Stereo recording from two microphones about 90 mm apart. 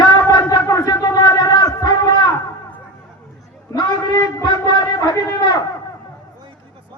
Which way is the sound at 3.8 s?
50° left (ahead or behind).